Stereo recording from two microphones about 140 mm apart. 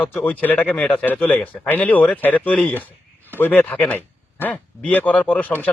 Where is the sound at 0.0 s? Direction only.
10° left (ahead or behind).